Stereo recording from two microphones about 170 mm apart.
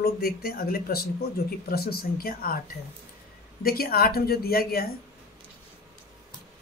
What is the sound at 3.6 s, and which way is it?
Speech, 60° left (ahead or behind).